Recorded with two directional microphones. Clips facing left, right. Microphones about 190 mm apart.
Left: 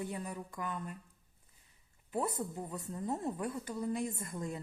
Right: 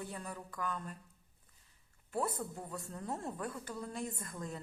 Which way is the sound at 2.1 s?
5° left (ahead or behind).